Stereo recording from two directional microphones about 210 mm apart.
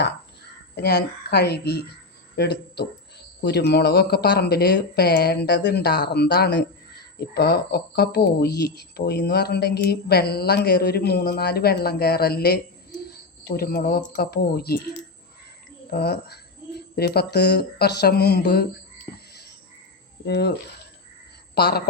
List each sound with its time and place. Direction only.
0.8 s speech: 50° left (ahead or behind)
15.9 s speech: 50° left (ahead or behind)
20.2 s speech: 50° left (ahead or behind)
21.5 s speech: 50° left (ahead or behind)